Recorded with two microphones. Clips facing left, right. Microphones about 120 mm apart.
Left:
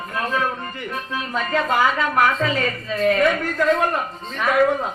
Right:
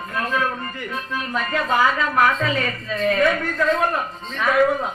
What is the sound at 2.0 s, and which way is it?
A woman's voice, centre (ahead or behind).